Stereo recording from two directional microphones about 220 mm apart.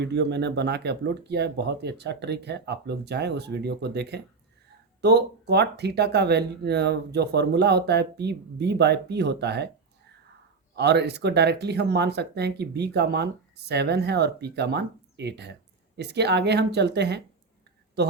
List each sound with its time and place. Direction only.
0.0 s speech: 50° right (ahead or behind)
10.8 s speech: 50° right (ahead or behind)